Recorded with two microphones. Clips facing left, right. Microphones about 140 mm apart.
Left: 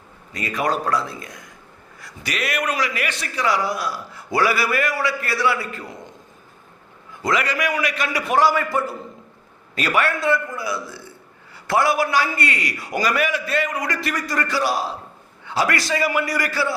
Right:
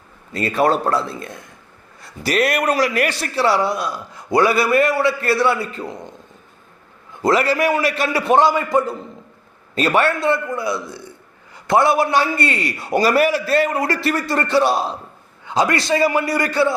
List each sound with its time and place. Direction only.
0.3 s a man's voice: 30° right (ahead or behind)
2.0 s a sound: 25° right (ahead or behind)
2.3 s a man's voice: 35° right (ahead or behind)
7.3 s a man's voice: 30° right (ahead or behind)